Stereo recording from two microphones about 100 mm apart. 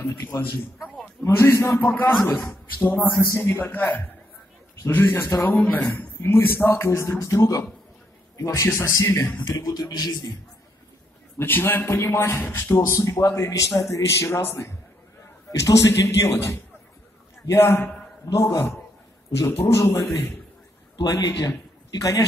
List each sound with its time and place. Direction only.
1.2 s a man's voice: 20° left (ahead or behind); by 10.3 s 40° left (ahead or behind)
11.3 s a man's voice: 20° left (ahead or behind)
21.0 s a man's voice: 40° left (ahead or behind)